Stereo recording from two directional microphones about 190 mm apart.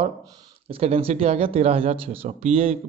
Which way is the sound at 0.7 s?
30° right (ahead or behind).